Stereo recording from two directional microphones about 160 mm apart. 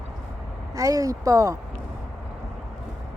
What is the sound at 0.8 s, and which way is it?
Speech, 20° right (ahead or behind).